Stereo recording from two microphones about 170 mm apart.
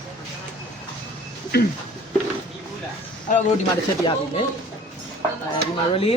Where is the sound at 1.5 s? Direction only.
70° left (ahead or behind).